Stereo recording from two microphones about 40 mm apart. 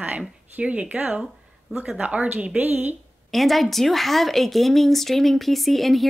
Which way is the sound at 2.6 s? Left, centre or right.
Right.